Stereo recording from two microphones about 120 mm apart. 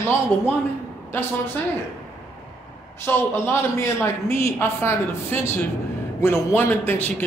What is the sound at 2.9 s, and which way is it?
A man's voice, 20° left (ahead or behind).